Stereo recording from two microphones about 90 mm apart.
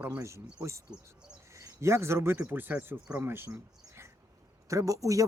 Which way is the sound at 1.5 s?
35° right (ahead or behind).